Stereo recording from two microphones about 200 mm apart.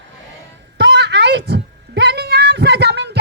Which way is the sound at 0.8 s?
60° right (ahead or behind).